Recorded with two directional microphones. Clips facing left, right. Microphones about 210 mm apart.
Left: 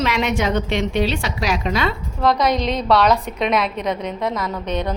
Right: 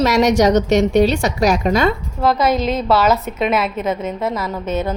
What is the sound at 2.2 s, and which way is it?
A woman's voice, 5° right (ahead or behind).